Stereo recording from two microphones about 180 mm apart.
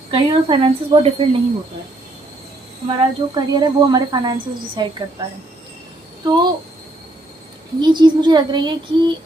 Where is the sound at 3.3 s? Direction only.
25° right (ahead or behind).